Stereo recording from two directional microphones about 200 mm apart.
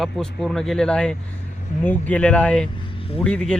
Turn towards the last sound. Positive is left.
turn(degrees=5)  # may be behind; listen again after turning